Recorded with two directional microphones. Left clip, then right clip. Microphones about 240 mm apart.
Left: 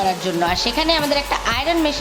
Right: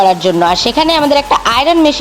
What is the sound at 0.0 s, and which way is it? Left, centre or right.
Speech, right.